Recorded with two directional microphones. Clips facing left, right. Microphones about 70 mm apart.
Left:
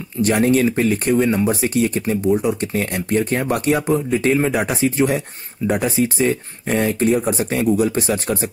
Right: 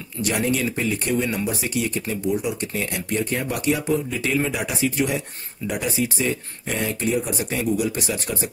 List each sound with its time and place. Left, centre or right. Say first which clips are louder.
0.2 s speech: left 7 dB; left